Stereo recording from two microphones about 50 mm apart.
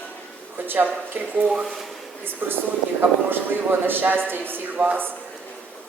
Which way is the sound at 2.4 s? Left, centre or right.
Right.